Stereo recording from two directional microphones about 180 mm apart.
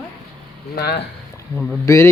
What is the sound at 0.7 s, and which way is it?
Speech, 60° left (ahead or behind).